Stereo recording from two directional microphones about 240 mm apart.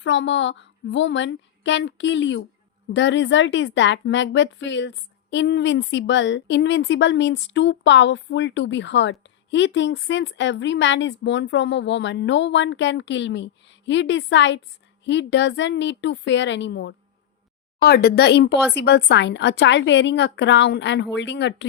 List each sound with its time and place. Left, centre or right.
0.0 s a woman's voice: left